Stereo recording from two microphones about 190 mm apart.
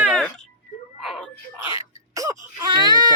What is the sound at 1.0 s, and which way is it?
Wail, centre (ahead or behind).